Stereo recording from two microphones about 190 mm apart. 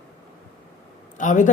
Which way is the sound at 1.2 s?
40° left (ahead or behind).